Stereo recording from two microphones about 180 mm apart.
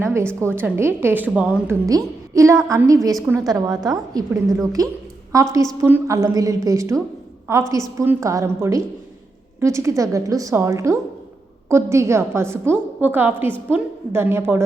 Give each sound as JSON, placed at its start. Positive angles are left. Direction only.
{"t": 0.0, "sound": "a woman's voice", "side_deg": -15}
{"t": 1.9, "sound": "a woman's voice", "side_deg": -20}